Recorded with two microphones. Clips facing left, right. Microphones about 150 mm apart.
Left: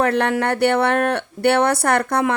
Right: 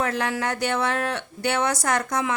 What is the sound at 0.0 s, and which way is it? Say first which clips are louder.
Speech: left 7 dB; 60° left (ahead or behind).